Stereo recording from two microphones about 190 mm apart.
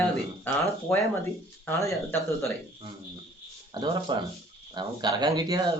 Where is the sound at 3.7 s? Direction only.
25° right (ahead or behind).